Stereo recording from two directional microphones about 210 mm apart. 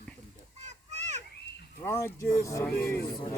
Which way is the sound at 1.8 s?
10° left (ahead or behind).